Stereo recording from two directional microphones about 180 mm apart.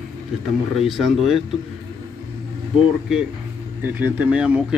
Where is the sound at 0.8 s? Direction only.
Centre (ahead or behind).